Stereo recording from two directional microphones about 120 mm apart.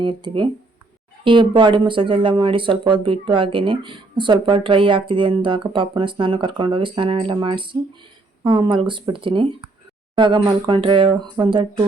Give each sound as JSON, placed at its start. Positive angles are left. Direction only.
{"t": 0.0, "sound": "speech", "side_deg": -40}